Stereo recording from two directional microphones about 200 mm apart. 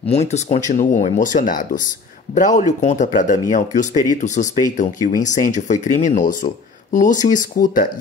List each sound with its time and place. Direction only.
0.1 s speech: 30° left (ahead or behind)